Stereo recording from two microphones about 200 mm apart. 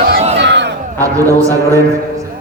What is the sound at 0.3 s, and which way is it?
Crowd, 60° right (ahead or behind).